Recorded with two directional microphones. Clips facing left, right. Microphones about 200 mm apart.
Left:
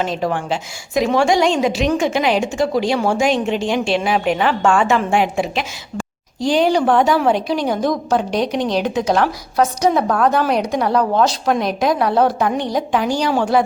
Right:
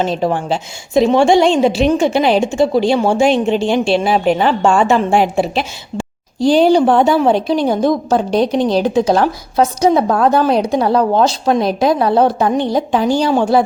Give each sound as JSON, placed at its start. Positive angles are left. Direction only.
{"t": 0.0, "sound": "a woman's voice", "side_deg": -30}